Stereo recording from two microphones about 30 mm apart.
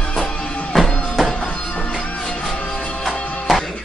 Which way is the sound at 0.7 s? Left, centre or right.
Centre.